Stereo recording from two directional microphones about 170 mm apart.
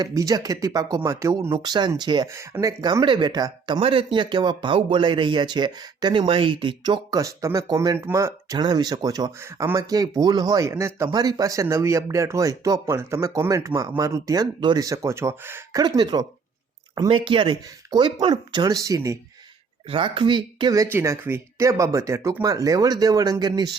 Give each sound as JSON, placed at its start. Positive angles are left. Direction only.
{"t": 0.0, "sound": "speech", "side_deg": -20}
{"t": 15.8, "sound": "speech", "side_deg": -25}
{"t": 19.9, "sound": "speech", "side_deg": -30}